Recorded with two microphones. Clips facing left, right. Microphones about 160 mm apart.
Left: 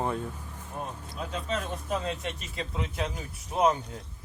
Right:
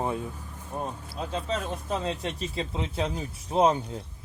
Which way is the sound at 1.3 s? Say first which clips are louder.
Right 2 dB; 30° right (ahead or behind).